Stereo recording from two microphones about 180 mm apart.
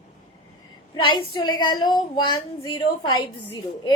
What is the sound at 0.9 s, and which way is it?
A woman's voice, 25° left (ahead or behind).